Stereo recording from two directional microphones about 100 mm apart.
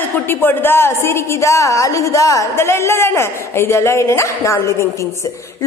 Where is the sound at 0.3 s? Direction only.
20° left (ahead or behind).